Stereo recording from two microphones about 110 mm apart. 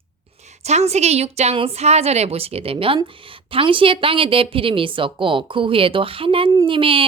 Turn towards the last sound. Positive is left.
turn(degrees=-55)  # may be behind; listen again after turning